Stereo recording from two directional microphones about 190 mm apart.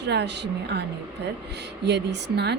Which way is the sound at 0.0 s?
65° right (ahead or behind).